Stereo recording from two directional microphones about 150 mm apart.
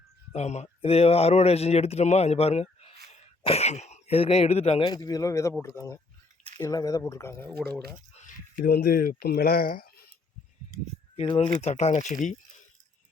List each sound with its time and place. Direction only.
0.3 s speech: 50° left (ahead or behind)
4.9 s a man's voice: 25° left (ahead or behind)
8.5 s speech: 90° left
11.2 s speech: 35° left (ahead or behind)
11.6 s speech: 45° left (ahead or behind)